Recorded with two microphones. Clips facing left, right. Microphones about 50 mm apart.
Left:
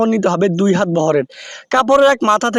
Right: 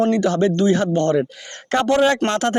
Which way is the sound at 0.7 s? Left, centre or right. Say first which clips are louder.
Left 4 dB; left.